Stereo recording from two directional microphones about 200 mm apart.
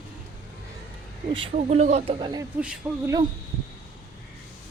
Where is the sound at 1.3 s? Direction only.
25° right (ahead or behind).